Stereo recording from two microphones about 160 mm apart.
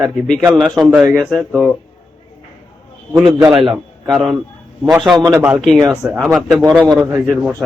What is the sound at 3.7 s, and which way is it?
A man's voice, centre (ahead or behind).